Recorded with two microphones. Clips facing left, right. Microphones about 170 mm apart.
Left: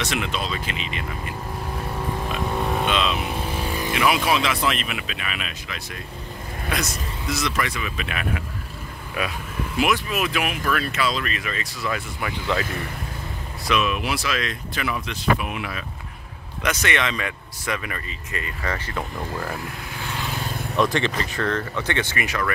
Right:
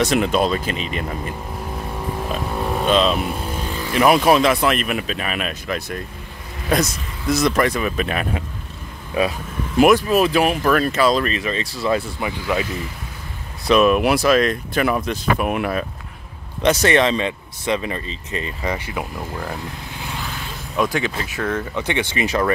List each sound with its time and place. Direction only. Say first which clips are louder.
0.0 s speech: right 9 dB; 45° right (ahead or behind)
2.9 s speech: right 6 dB; 40° right (ahead or behind)
9.2 s speech: right 8 dB; 25° right (ahead or behind)
9.8 s speech: right 9 dB; 45° right (ahead or behind)
11.3 s speech: right 6 dB; 30° right (ahead or behind)
12.3 s speech: right 2 dB; 15° right (ahead or behind)
13.7 s speech: right 10 dB; 50° right (ahead or behind)
16.8 s speech: right 7 dB; 35° right (ahead or behind); by 19.5 s 10° right (ahead or behind)
20.7 s speech: right 1 dB; 5° right (ahead or behind); by 22.5 s 25° right (ahead or behind)